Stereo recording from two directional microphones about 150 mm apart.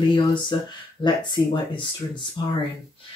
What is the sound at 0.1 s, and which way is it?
Speech, 30° left (ahead or behind).